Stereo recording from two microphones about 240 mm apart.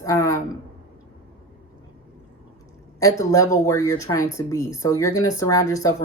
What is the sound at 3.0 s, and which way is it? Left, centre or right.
Speech, centre.